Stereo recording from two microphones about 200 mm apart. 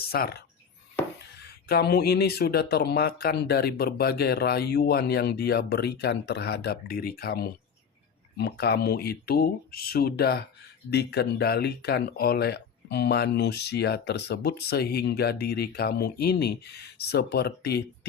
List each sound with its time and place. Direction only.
0.0 s speech: 50° left (ahead or behind)